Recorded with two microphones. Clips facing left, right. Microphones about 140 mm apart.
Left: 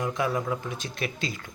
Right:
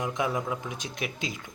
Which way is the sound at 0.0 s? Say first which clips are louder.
Left 2 dB; 20° right (ahead or behind).